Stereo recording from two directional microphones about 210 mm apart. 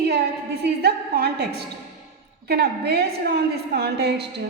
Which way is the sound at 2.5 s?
50° right (ahead or behind).